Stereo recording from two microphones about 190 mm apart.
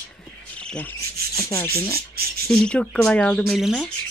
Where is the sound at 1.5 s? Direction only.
15° left (ahead or behind).